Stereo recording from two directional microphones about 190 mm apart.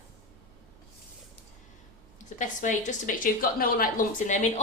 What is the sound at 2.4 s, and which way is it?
A woman's voice, 40° left (ahead or behind).